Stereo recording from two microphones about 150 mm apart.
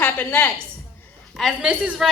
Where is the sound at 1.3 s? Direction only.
5° right (ahead or behind).